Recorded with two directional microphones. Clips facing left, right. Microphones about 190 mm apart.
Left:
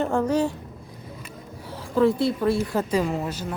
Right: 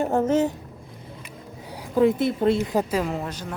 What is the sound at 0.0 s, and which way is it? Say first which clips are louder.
Speech: right 1 dB; 20° right (ahead or behind).